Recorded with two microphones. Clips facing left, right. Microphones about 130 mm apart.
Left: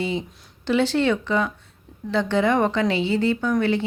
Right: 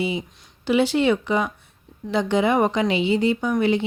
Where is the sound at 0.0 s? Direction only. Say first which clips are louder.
Right 1 dB; 10° right (ahead or behind).